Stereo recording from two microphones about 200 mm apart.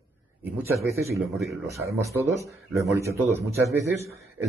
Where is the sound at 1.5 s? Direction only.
15° right (ahead or behind).